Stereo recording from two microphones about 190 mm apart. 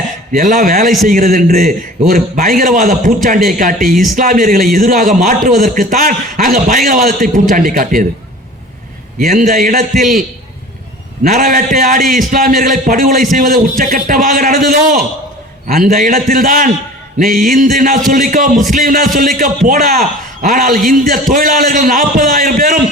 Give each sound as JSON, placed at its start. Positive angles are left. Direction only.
{"t": 0.3, "sound": "a man's voice", "side_deg": -45}
{"t": 9.2, "sound": "a man's voice", "side_deg": -45}